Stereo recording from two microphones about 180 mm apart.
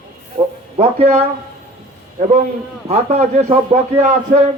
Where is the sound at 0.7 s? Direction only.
35° right (ahead or behind).